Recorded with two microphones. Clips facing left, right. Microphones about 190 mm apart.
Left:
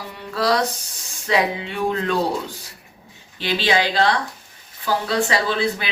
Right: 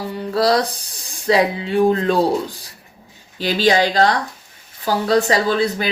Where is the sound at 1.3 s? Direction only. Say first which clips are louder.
Right 5 dB; 35° right (ahead or behind).